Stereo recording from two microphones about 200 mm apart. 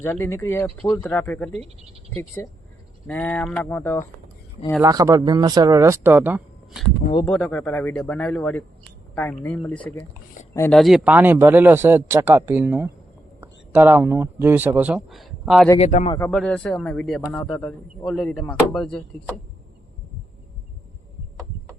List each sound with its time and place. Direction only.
0.0 s speech: 10° left (ahead or behind)
1.6 s speech: 30° right (ahead or behind)
3.1 s speech: 5° left (ahead or behind)
4.8 s speech: 15° right (ahead or behind)
7.3 s speech: 5° left (ahead or behind)
10.8 s speech: centre (ahead or behind)
15.8 s a man's voice: 35° left (ahead or behind)
16.3 s speech: centre (ahead or behind)